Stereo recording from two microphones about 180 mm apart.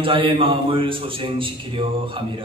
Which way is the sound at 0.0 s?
30° right (ahead or behind).